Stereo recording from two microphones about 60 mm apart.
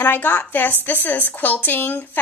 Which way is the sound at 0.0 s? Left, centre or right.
Left.